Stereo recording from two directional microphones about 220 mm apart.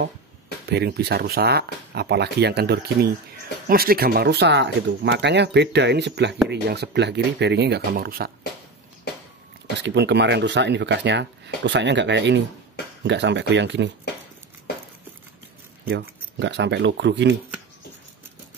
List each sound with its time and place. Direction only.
0.7 s speech: 50° right (ahead or behind)
9.8 s speech: 50° right (ahead or behind)
15.9 s speech: 50° right (ahead or behind)